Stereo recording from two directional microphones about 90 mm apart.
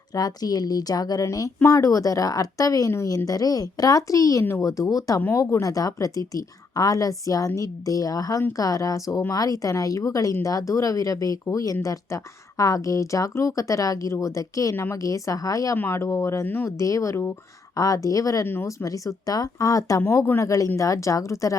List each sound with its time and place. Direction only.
0.1 s a woman's voice: 45° left (ahead or behind)
15.7 s a woman's voice: 30° left (ahead or behind)
16.6 s a woman's voice: 35° left (ahead or behind)
18.4 s a woman's voice: 30° left (ahead or behind)
20.0 s a woman's voice: 25° left (ahead or behind)